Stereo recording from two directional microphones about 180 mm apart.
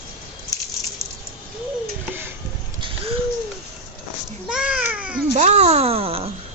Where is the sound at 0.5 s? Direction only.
20° left (ahead or behind).